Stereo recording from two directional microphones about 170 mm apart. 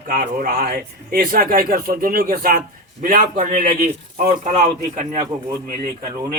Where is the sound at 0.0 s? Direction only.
55° right (ahead or behind).